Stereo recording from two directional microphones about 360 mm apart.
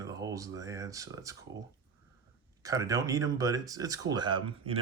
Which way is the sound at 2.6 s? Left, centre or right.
Centre.